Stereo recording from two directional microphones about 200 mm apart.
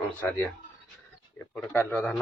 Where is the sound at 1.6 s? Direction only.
5° left (ahead or behind).